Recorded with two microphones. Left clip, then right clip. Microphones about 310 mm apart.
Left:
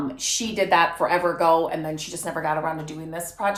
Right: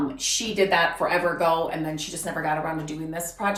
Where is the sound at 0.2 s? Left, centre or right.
Left.